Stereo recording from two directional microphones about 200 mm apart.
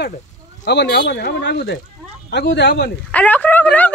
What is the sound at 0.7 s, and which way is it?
Speech, 55° left (ahead or behind).